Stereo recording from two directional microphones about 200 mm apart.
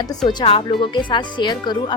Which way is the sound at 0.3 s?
25° left (ahead or behind).